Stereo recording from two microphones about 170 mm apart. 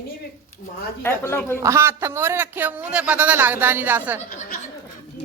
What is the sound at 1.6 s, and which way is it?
Speech, 15° right (ahead or behind).